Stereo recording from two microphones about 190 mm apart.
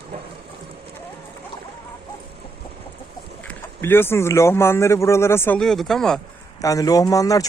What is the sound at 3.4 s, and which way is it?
Speech, 10° left (ahead or behind).